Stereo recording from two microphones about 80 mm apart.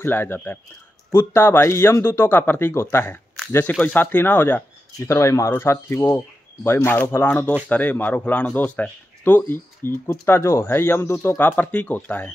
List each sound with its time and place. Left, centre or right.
0.0 s speech: left
4.9 s speech: left